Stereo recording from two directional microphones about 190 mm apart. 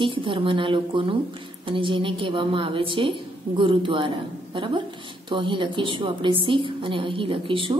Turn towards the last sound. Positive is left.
turn(degrees=-25)  # may be behind; listen again after turning